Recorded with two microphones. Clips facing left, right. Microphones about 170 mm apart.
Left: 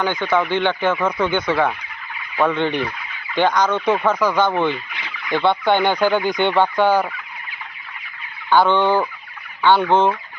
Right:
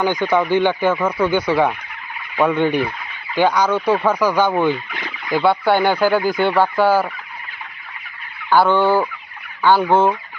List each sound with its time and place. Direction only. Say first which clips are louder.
0.0 s speech: right 2 dB; 15° right (ahead or behind)
4.9 s fowl: right 4 dB; 50° right (ahead or behind)
5.3 s speech: right 1 dB; 5° right (ahead or behind)
8.4 s speech: right 1 dB; 5° right (ahead or behind)